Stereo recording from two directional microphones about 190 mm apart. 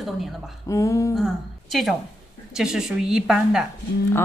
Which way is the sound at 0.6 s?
15° left (ahead or behind).